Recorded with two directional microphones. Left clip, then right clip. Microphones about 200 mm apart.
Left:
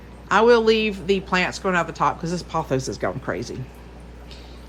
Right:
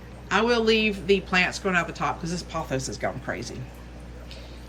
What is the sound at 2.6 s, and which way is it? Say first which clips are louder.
Speech: left 4 dB; 35° left (ahead or behind).